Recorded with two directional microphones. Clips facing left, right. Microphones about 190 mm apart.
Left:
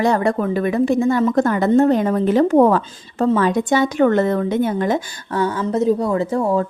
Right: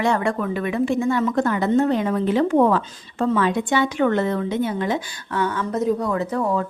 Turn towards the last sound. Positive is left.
turn(degrees=30)  # may be behind; listen again after turning